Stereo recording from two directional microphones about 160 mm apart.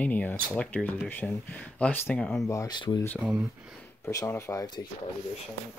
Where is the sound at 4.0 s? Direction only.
20° left (ahead or behind).